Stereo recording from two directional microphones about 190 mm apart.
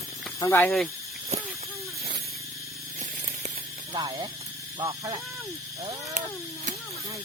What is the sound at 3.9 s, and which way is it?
Speech, 25° right (ahead or behind).